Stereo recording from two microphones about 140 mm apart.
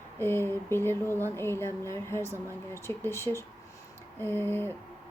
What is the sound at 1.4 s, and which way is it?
Speech, 15° left (ahead or behind).